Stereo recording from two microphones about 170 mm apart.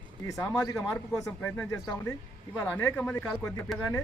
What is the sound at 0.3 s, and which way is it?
Speech, 20° left (ahead or behind).